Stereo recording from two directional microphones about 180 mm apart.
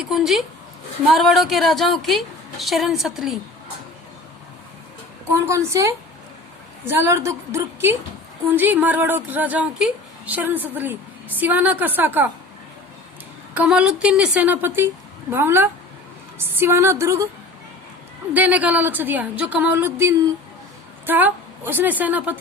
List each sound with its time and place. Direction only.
0.0 s a woman's voice: centre (ahead or behind)
5.3 s a woman's voice: 15° right (ahead or behind)
13.5 s a woman's voice: 5° right (ahead or behind)
18.3 s a woman's voice: 10° right (ahead or behind)